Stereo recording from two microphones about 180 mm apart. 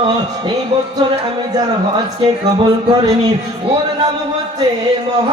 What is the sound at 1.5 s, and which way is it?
Music, 20° right (ahead or behind).